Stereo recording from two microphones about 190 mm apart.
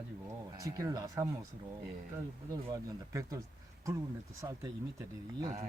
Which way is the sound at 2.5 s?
20° right (ahead or behind).